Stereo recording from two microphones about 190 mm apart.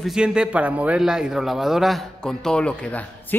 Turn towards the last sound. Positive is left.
turn(degrees=5)  # may be behind; listen again after turning